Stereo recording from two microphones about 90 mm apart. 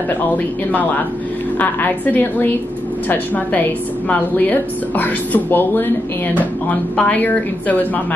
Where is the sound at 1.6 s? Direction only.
20° left (ahead or behind).